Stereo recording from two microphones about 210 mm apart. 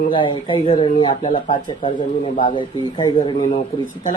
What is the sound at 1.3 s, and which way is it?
Speech, 40° left (ahead or behind).